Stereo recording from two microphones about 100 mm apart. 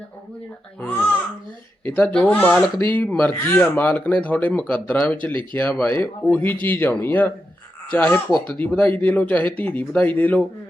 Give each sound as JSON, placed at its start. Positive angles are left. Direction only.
{"t": 1.8, "sound": "speech", "side_deg": 20}
{"t": 5.3, "sound": "speech", "side_deg": -55}
{"t": 5.5, "sound": "speech", "side_deg": 15}